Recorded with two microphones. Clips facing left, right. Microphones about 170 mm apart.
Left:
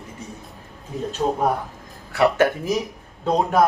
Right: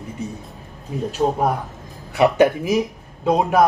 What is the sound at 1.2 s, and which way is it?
A man's voice, 15° right (ahead or behind).